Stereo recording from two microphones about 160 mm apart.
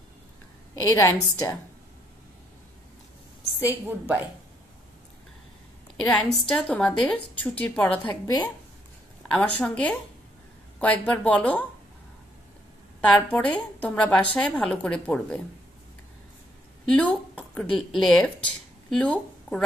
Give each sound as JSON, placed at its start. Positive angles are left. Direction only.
{"t": 0.9, "sound": "a woman's voice", "side_deg": 20}
{"t": 3.5, "sound": "a woman's voice", "side_deg": -10}
{"t": 6.4, "sound": "a woman's voice", "side_deg": 5}
{"t": 8.0, "sound": "a woman's voice", "side_deg": 30}
{"t": 9.3, "sound": "a woman's voice", "side_deg": 5}
{"t": 13.0, "sound": "a woman's voice", "side_deg": 5}
{"t": 16.8, "sound": "speech", "side_deg": 5}